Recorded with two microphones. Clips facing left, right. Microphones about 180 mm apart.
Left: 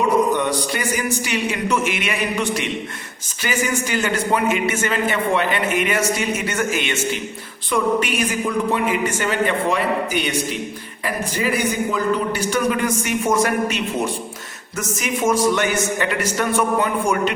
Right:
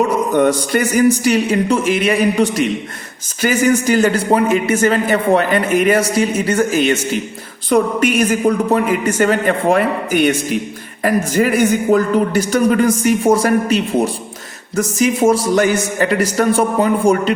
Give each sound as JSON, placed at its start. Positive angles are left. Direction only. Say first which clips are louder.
{"t": 0.3, "sound": "a man's voice", "louder": "right 8 dB", "side_deg": -50}